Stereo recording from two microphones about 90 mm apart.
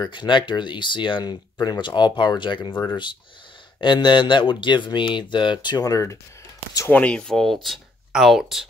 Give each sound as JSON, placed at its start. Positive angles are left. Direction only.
{"t": 0.1, "sound": "speech", "side_deg": 60}
{"t": 6.9, "sound": "speech", "side_deg": 15}